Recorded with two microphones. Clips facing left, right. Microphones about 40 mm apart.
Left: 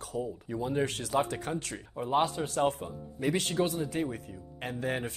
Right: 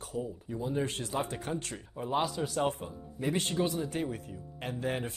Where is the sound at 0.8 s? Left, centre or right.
Left.